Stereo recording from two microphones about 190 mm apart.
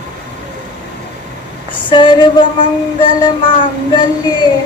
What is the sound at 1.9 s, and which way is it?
Child singing, 25° left (ahead or behind).